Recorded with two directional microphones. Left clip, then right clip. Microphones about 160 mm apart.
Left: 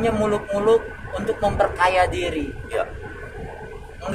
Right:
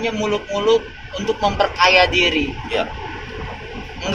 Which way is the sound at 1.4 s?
20° right (ahead or behind).